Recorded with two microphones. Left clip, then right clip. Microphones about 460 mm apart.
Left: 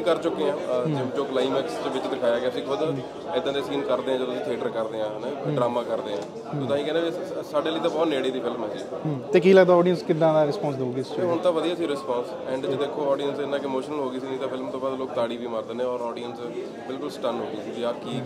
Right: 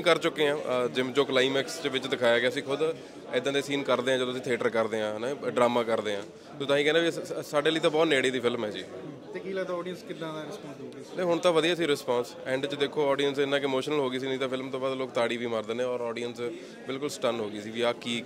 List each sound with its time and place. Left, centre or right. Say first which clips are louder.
0.0 s a man's voice: left 1 dB; right
9.3 s a man's voice: left 18 dB; left
9.8 s a man's voice: left 16 dB; left
11.2 s speech: even; right